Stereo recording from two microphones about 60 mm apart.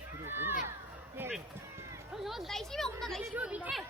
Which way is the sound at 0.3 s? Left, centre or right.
Right.